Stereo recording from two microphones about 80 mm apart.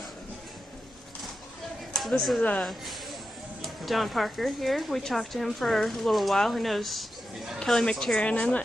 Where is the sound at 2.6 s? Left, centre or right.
Centre.